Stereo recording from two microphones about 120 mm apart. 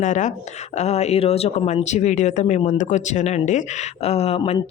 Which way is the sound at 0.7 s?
65° left (ahead or behind).